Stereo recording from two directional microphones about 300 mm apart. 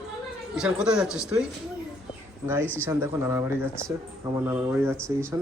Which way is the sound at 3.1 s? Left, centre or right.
Centre.